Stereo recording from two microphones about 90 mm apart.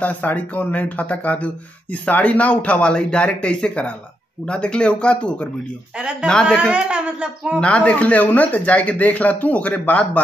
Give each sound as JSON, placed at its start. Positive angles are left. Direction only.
{"t": 0.0, "sound": "speech", "side_deg": 20}
{"t": 6.7, "sound": "speech", "side_deg": -10}
{"t": 7.6, "sound": "speech", "side_deg": 15}